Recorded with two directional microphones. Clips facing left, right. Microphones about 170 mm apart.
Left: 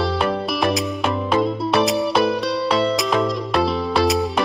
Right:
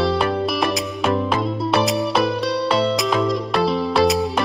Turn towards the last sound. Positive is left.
turn(degrees=0)  # may be behind; listen again after turning